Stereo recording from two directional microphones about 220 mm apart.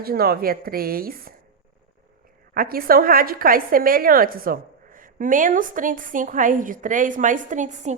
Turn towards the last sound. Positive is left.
turn(degrees=-35)  # may be behind; listen again after turning